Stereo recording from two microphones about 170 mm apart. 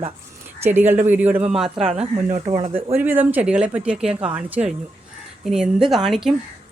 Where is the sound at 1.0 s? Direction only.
10° right (ahead or behind).